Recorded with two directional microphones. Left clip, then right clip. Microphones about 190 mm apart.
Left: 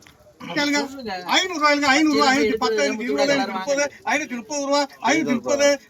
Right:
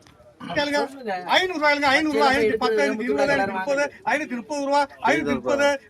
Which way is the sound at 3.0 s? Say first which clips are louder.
Left 1 dB; 10° right (ahead or behind).